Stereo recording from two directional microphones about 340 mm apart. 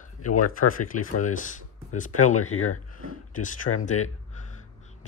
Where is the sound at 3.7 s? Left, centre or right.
Left.